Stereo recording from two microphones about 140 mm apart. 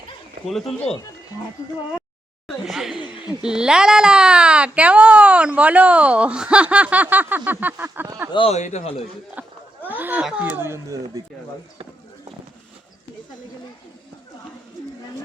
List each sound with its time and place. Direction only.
0.4 s speech: 5° left (ahead or behind)
2.5 s speech: centre (ahead or behind)
8.3 s speech: 40° left (ahead or behind)
8.5 s a man's voice: 55° left (ahead or behind)
9.4 s speech: 10° right (ahead or behind)